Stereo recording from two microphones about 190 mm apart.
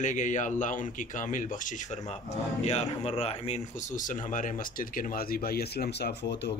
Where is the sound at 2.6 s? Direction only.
35° left (ahead or behind).